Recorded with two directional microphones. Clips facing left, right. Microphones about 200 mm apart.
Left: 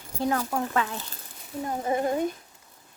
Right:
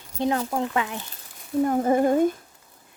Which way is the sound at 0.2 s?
20° right (ahead or behind).